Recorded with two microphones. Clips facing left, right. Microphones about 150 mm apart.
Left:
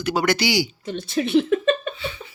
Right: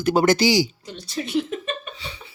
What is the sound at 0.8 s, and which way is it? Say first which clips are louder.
Speech: left 7 dB; 60° left (ahead or behind).